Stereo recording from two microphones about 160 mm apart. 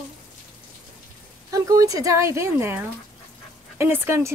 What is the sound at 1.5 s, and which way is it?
Speech, 20° right (ahead or behind).